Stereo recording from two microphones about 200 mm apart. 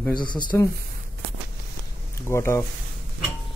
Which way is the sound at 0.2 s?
25° left (ahead or behind).